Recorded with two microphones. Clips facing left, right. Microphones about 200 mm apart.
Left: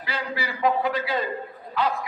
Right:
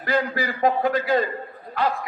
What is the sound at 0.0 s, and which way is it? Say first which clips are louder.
A man's voice: right 7 dB; 50° right (ahead or behind).